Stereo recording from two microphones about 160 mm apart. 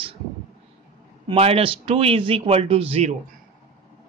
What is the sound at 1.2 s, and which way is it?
Speech, 40° right (ahead or behind).